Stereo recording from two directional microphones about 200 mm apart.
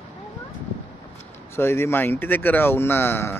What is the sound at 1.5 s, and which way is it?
Speech, 10° left (ahead or behind).